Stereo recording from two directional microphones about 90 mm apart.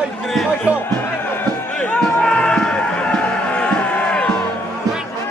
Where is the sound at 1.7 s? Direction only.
10° left (ahead or behind).